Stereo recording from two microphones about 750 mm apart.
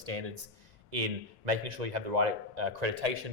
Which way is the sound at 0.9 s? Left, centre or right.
Right.